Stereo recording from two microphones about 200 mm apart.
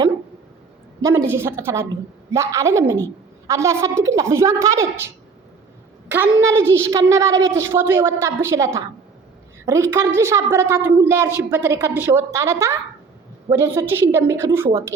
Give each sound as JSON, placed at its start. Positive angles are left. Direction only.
{"t": 1.3, "sound": "a woman's voice", "side_deg": -10}